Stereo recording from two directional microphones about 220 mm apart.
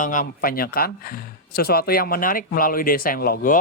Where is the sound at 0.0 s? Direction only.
35° left (ahead or behind).